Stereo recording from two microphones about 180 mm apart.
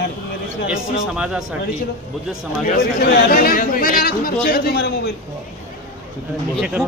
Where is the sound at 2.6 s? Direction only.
60° left (ahead or behind).